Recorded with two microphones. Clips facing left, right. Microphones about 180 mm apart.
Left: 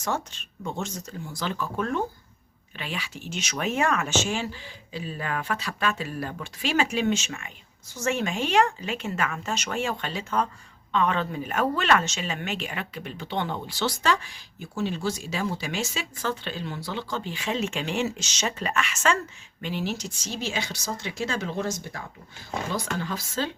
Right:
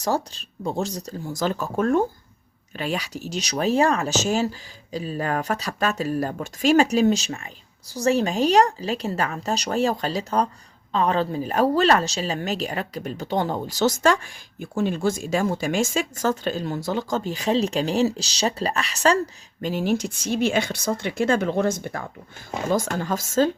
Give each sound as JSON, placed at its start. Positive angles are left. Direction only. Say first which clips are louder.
{"t": 0.0, "sound": "speech", "louder": "right 5 dB", "side_deg": -35}
{"t": 22.7, "sound": "speech", "louder": "right 9 dB", "side_deg": -45}